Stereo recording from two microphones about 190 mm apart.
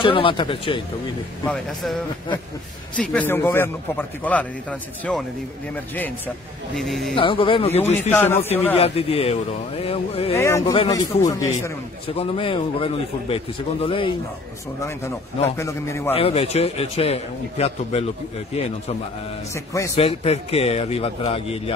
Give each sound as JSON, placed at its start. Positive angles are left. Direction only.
{"t": 0.0, "sound": "a man's voice", "side_deg": 25}
{"t": 1.4, "sound": "speech", "side_deg": 5}
{"t": 3.0, "sound": "a man's voice", "side_deg": 5}
{"t": 7.2, "sound": "a man's voice", "side_deg": 25}
{"t": 8.1, "sound": "a man's voice", "side_deg": 10}
{"t": 8.7, "sound": "a man's voice", "side_deg": 30}
{"t": 10.3, "sound": "a man's voice", "side_deg": 15}
{"t": 12.1, "sound": "a man's voice", "side_deg": 30}
{"t": 15.4, "sound": "a man's voice", "side_deg": 15}
{"t": 16.1, "sound": "a man's voice", "side_deg": 30}
{"t": 19.5, "sound": "a man's voice", "side_deg": 15}
{"t": 20.0, "sound": "a man's voice", "side_deg": 30}